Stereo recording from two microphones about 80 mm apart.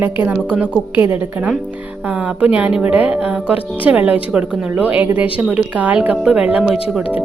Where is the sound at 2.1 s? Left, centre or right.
Centre.